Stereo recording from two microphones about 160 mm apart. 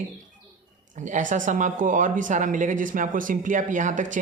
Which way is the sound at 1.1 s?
50° right (ahead or behind).